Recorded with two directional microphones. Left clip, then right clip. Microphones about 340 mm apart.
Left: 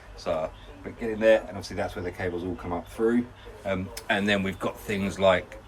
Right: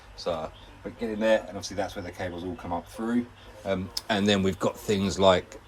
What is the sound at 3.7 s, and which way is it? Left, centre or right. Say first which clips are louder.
Speech: left 1 dB; centre.